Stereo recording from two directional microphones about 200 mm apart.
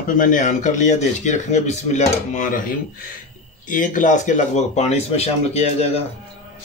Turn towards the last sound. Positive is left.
turn(degrees=30)  # may be behind; listen again after turning